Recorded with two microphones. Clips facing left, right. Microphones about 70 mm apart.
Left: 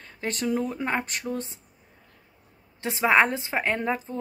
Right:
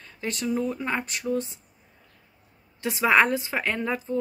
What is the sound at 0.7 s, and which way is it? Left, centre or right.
Speech, left.